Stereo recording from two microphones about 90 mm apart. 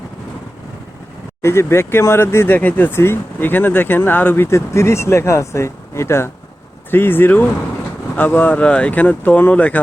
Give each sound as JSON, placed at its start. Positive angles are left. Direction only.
{"t": 1.4, "sound": "speech", "side_deg": 30}